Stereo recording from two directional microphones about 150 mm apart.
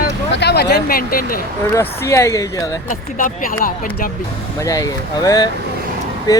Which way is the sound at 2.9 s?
65° left (ahead or behind).